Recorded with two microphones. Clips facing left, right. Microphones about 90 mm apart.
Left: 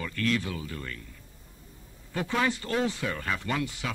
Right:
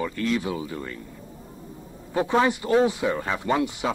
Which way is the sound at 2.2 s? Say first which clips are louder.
Right 7 dB; 20° right (ahead or behind).